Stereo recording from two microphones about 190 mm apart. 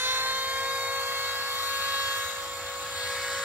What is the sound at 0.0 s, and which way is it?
Helicopter, 10° right (ahead or behind).